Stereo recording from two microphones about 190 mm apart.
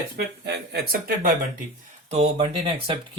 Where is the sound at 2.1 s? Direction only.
35° right (ahead or behind).